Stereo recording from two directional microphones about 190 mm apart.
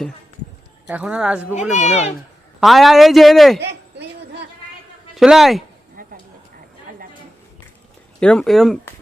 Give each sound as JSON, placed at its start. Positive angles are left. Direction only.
{"t": 0.9, "sound": "a woman's voice", "side_deg": -5}
{"t": 1.5, "sound": "speech", "side_deg": 35}
{"t": 2.6, "sound": "a man's voice", "side_deg": 0}
{"t": 5.1, "sound": "a man's voice", "side_deg": 0}
{"t": 6.0, "sound": "a sound", "side_deg": -50}
{"t": 8.2, "sound": "a man's voice", "side_deg": 5}